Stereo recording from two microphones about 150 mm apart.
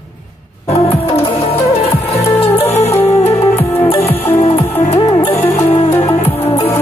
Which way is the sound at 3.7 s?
40° left (ahead or behind).